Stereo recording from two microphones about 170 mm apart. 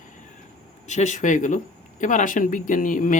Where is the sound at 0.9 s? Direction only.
45° left (ahead or behind).